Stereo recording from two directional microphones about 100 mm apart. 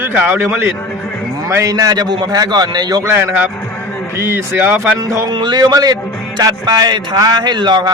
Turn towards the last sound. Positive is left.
turn(degrees=-45)  # may be behind; listen again after turning